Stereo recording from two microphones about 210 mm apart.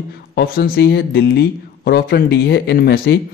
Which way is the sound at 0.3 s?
45° left (ahead or behind).